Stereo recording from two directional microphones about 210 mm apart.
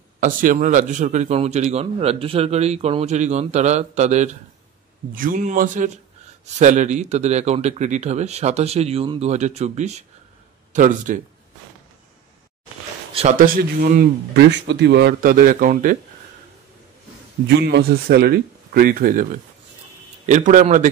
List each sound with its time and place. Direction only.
0.2 s a man's voice: 40° right (ahead or behind)
13.1 s a man's voice: 30° right (ahead or behind)
13.4 s a man's voice: 45° right (ahead or behind)
17.5 s a man's voice: 50° right (ahead or behind)
20.2 s a man's voice: 35° right (ahead or behind)